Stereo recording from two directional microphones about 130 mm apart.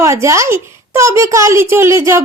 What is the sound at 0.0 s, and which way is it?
A child's voice, 25° right (ahead or behind).